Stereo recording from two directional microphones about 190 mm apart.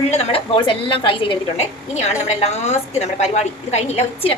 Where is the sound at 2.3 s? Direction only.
35° left (ahead or behind).